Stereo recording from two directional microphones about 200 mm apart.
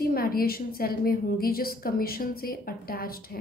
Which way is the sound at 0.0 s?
50° left (ahead or behind).